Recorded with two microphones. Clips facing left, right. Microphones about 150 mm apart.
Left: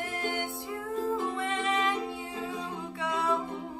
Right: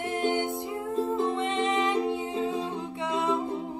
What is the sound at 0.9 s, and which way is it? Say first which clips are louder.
Music: right 3 dB; 20° right (ahead or behind).